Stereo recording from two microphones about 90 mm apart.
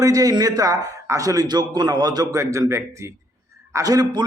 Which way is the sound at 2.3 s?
35° right (ahead or behind).